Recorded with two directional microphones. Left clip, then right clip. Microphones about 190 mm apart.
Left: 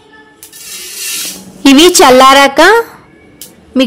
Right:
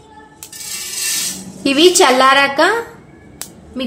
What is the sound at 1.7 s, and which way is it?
A woman's voice, 50° left (ahead or behind).